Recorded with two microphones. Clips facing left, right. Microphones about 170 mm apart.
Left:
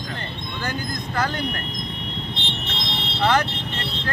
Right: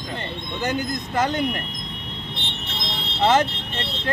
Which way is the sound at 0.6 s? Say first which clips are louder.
Right 4 dB; 20° right (ahead or behind).